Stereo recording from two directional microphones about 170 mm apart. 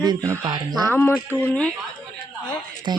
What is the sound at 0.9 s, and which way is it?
Speech, 10° left (ahead or behind).